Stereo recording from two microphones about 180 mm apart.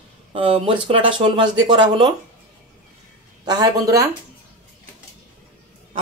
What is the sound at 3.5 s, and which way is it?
Speech, 20° right (ahead or behind).